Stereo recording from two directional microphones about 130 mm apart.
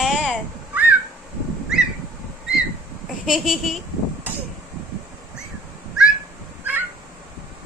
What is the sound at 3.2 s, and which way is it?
Speech, 5° right (ahead or behind).